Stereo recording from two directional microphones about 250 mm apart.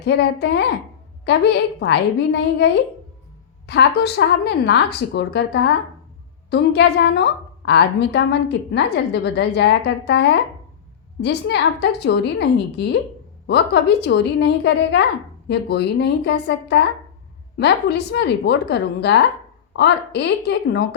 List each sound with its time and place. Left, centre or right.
0.0 s a woman's voice: left
3.7 s a woman's voice: left